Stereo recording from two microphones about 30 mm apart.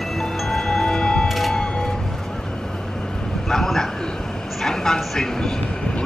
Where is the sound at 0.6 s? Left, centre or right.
Left.